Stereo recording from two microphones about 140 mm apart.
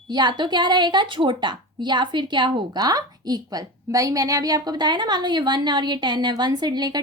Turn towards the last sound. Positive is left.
turn(degrees=-30)  # may be behind; listen again after turning